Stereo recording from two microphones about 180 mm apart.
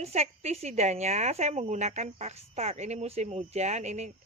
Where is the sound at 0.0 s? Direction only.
35° right (ahead or behind).